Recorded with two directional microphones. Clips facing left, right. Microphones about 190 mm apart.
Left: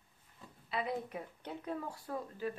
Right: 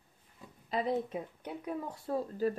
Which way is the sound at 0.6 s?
40° right (ahead or behind).